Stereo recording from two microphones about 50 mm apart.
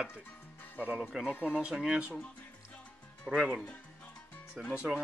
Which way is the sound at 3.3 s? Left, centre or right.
Centre.